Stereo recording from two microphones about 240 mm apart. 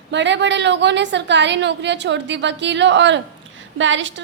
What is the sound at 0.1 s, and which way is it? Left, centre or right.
A woman's voice, right.